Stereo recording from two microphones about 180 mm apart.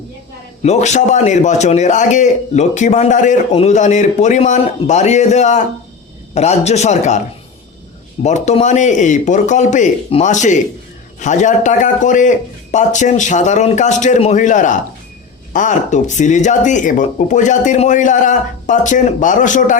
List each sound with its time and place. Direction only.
0.6 s a man's voice: 40° left (ahead or behind)
8.2 s a man's voice: 40° left (ahead or behind)